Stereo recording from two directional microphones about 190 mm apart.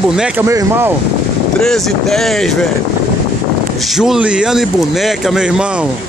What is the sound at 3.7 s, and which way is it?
A man's voice, centre (ahead or behind).